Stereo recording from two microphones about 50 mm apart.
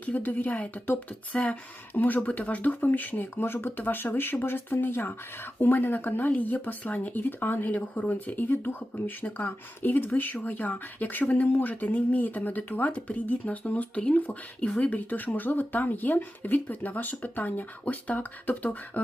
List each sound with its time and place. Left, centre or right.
0.0 s speech: left
3.4 s speech: left